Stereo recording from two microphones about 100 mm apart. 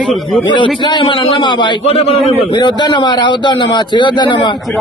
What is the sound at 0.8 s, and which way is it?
A man's voice, 50° left (ahead or behind).